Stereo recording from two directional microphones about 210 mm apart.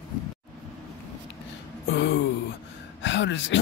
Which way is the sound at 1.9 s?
55° left (ahead or behind).